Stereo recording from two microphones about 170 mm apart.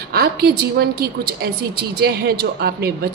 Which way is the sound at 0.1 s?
65° right (ahead or behind).